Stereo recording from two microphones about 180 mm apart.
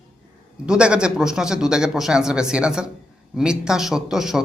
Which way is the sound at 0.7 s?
5° right (ahead or behind).